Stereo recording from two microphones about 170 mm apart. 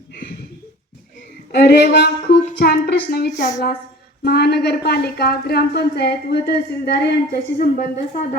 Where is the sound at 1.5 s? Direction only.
80° left.